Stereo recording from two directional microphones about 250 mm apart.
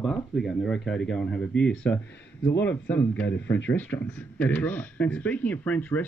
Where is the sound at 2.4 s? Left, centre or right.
Left.